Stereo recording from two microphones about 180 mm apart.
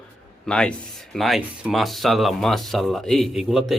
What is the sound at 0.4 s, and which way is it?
Speech, 5° left (ahead or behind).